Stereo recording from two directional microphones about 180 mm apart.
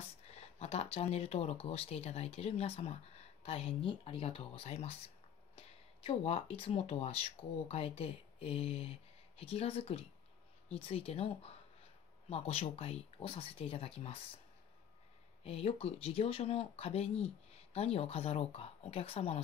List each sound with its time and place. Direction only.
0.2 s speech: 35° left (ahead or behind)
15.4 s speech: 35° left (ahead or behind)